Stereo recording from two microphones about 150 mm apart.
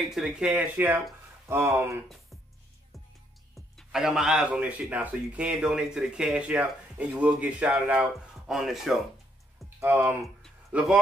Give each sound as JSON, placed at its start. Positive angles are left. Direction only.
{"t": 0.0, "sound": "speech", "side_deg": 0}
{"t": 3.7, "sound": "speech", "side_deg": 0}
{"t": 9.8, "sound": "speech", "side_deg": -15}